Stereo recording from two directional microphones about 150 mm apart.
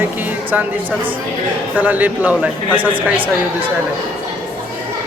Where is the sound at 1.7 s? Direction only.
10° right (ahead or behind).